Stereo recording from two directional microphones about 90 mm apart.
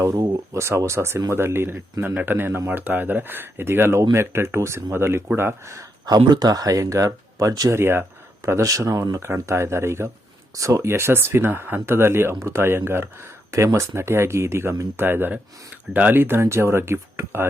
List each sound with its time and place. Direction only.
0.0 s speech: 40° right (ahead or behind)
6.2 s speech: 50° right (ahead or behind)
7.7 s speech: 25° right (ahead or behind)